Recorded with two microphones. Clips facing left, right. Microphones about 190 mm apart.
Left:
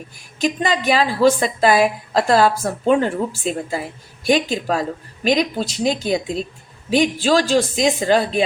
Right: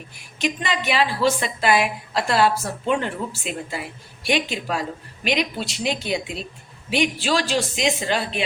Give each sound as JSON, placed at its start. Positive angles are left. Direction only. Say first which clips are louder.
{"t": 0.3, "sound": "a woman's voice", "louder": "left 5 dB", "side_deg": 40}